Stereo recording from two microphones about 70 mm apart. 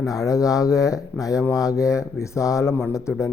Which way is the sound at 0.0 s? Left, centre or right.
Left.